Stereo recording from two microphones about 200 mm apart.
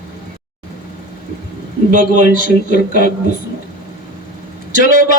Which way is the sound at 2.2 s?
50° left (ahead or behind).